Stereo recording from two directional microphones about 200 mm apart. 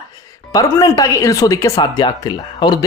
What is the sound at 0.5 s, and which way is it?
Speech, 15° left (ahead or behind).